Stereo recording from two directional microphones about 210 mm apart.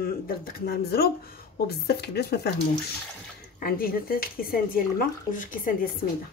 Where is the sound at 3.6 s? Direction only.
45° left (ahead or behind).